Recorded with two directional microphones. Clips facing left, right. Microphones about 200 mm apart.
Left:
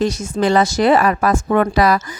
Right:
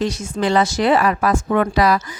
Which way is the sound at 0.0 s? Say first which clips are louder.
Left 3 dB; 45° left (ahead or behind).